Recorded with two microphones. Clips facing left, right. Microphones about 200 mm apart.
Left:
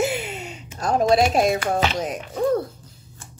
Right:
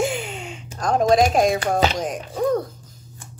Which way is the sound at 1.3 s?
5° left (ahead or behind).